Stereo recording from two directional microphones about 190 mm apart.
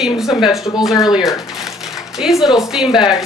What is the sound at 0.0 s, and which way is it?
A woman's voice, centre (ahead or behind).